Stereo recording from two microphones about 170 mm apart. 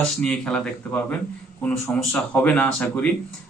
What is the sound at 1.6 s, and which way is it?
Speech, 5° left (ahead or behind).